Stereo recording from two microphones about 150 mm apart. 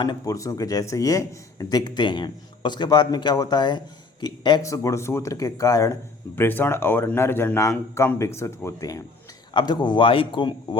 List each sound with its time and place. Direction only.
0.0 s a man's voice: 25° left (ahead or behind)